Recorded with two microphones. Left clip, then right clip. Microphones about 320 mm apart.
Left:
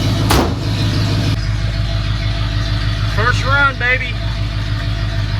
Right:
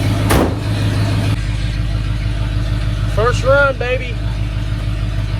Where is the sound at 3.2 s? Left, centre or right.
Centre.